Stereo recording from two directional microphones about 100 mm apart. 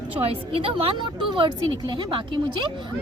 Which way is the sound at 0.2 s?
75° right (ahead or behind).